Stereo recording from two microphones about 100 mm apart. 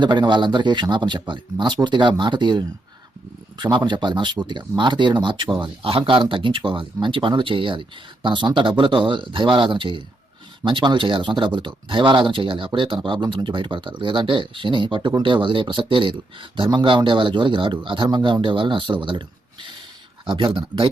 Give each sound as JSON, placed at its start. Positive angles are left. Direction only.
{"t": 0.0, "sound": "a man's voice", "side_deg": -50}
{"t": 20.2, "sound": "speech", "side_deg": -55}